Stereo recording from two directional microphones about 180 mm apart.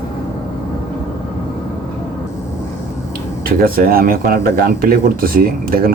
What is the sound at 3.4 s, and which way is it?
Speech, 55° right (ahead or behind).